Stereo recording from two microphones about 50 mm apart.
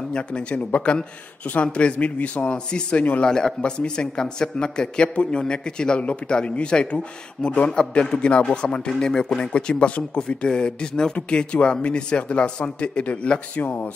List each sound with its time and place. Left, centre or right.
0.1 s a man's voice: centre
3.3 s a man's voice: centre; by 13.8 s left